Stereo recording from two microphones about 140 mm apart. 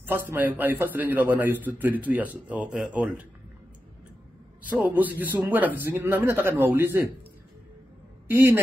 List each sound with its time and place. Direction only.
0.0 s a man's voice: 15° right (ahead or behind)
4.6 s a man's voice: 10° right (ahead or behind)
8.3 s a man's voice: 15° right (ahead or behind)